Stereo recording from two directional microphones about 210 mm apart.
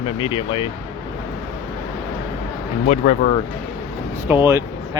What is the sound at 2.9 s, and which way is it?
Speech, 35° left (ahead or behind).